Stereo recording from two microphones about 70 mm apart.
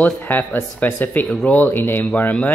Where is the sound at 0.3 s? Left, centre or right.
Left.